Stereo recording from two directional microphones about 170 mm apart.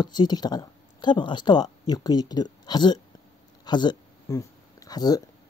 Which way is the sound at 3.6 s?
25° left (ahead or behind).